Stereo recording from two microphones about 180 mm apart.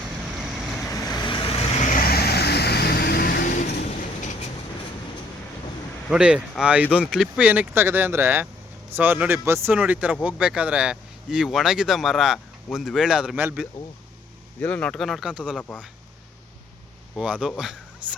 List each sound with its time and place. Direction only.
0.2 s vehicle: 5° right (ahead or behind)
0.9 s vehicle: 20° left (ahead or behind); by 4.3 s 45° left (ahead or behind)
6.1 s speech: 5° right (ahead or behind)
14.6 s speech: 5° left (ahead or behind)
17.2 s speech: 5° right (ahead or behind)